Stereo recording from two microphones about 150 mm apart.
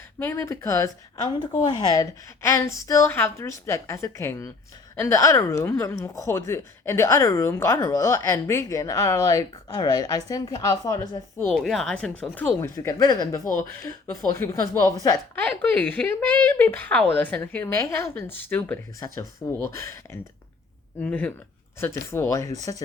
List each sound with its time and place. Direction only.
0.2 s a woman's voice: 15° left (ahead or behind)
11.5 s speech: centre (ahead or behind); by 13.1 s 20° left (ahead or behind)
13.4 s speech: 60° left (ahead or behind)
14.3 s a woman's voice: 20° left (ahead or behind)
15.4 s speech: 10° left (ahead or behind)
18.9 s a woman's voice: 25° left (ahead or behind)